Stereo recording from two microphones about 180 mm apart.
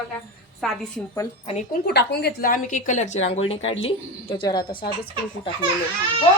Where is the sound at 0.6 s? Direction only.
Centre (ahead or behind).